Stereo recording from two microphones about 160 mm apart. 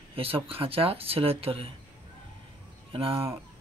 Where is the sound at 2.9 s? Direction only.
35° right (ahead or behind).